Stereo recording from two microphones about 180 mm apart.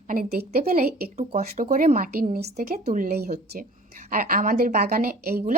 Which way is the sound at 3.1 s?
60° right (ahead or behind).